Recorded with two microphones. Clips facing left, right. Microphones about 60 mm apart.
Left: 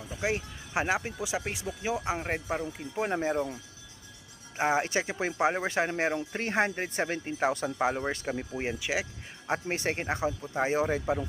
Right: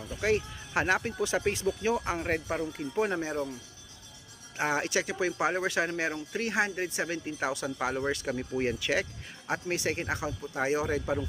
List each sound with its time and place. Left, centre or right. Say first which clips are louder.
0.0 s speech: right 3 dB; centre
3.2 s speech: left 3 dB; left
4.5 s speech: left 2 dB; left
8.3 s speech: right 2 dB; centre
9.5 s speech: left 1 dB; left
11.0 s speech: left 1 dB; centre